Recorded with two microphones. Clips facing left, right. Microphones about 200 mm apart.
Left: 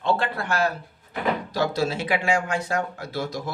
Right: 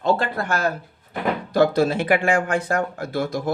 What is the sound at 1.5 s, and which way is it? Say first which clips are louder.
Speech: right 11 dB; 55° right (ahead or behind).